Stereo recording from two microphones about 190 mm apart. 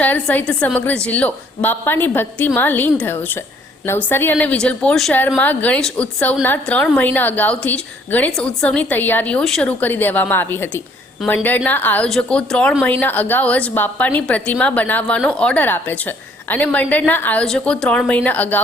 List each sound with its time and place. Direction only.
0.0 s a woman's voice: 10° left (ahead or behind)